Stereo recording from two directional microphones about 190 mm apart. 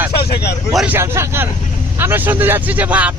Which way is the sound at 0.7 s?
10° right (ahead or behind).